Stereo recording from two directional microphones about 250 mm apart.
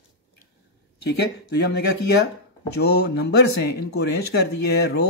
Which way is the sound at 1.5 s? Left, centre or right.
Left.